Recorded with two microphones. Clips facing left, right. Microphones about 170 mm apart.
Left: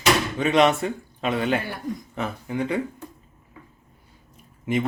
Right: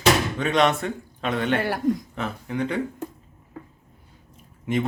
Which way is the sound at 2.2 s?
5° left (ahead or behind).